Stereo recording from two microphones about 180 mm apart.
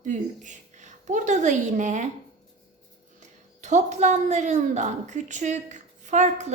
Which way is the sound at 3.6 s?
40° right (ahead or behind).